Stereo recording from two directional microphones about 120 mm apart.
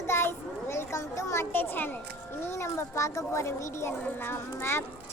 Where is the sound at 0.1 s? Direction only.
20° left (ahead or behind).